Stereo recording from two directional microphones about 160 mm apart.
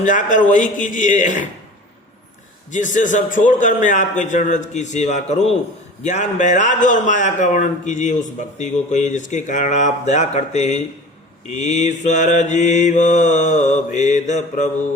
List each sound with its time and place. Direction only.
0.0 s a man's voice: 50° left (ahead or behind)
2.7 s a man's voice: 50° left (ahead or behind)